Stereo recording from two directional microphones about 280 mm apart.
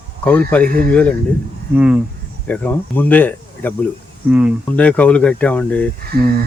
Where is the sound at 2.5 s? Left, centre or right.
Centre.